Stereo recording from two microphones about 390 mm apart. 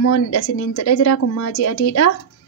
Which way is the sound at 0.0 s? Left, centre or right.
Left.